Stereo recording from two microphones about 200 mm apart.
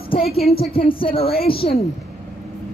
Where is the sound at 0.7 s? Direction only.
25° left (ahead or behind).